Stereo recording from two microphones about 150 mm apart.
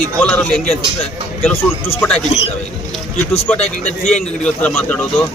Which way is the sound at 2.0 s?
5° left (ahead or behind).